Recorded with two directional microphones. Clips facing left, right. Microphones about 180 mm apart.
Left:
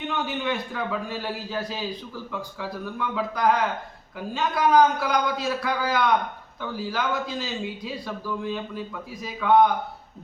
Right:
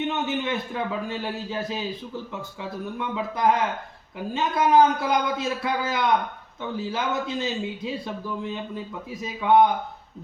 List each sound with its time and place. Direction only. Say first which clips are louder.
0.1 s a man's voice: right 1 dB; 25° right (ahead or behind)